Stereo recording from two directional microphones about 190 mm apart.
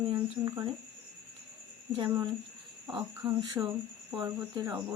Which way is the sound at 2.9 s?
20° right (ahead or behind).